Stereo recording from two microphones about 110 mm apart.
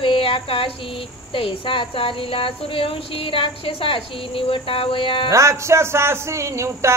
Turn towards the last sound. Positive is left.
turn(degrees=-25)  # may be behind; listen again after turning